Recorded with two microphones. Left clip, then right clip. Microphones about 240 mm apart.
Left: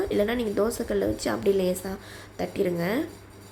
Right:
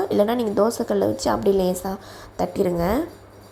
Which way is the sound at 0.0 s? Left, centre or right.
Centre.